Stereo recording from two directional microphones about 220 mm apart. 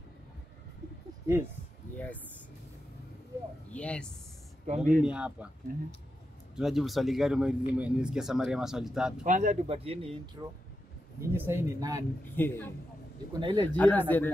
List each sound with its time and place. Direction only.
1.2 s speech: 10° right (ahead or behind)
3.7 s speech: 5° left (ahead or behind)
4.6 s speech: 35° right (ahead or behind)
5.0 s speech: 5° right (ahead or behind)
5.7 s speech: 40° right (ahead or behind)
6.5 s speech: centre (ahead or behind)
9.2 s speech: 35° right (ahead or behind)
11.1 s speech: 10° right (ahead or behind)
12.4 s speech: 10° left (ahead or behind)
13.4 s speech: 20° right (ahead or behind)
13.7 s speech: 10° left (ahead or behind)